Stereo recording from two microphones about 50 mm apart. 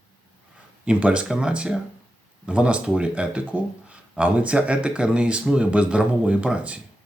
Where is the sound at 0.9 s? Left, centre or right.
Right.